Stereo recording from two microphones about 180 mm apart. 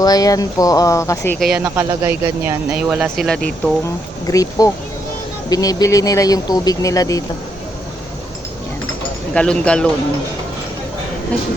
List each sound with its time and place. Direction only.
0.0 s speech: 20° left (ahead or behind)
1.4 s speech: centre (ahead or behind)
1.6 s speech: 20° right (ahead or behind)
3.0 s speech: centre (ahead or behind)
4.3 s speech: 20° left (ahead or behind)
9.3 s speech: 5° left (ahead or behind)